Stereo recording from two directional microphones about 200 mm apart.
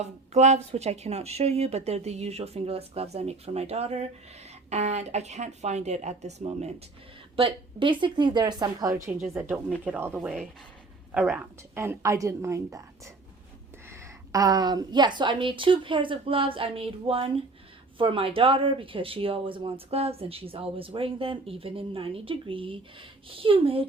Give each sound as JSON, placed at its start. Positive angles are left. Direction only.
{"t": 0.0, "sound": "a woman's voice", "side_deg": -35}
{"t": 9.3, "sound": "a woman's voice", "side_deg": -5}
{"t": 13.9, "sound": "speech", "side_deg": -20}